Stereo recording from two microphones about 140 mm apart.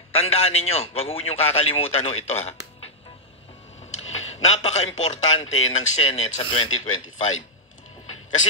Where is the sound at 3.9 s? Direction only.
50° left (ahead or behind).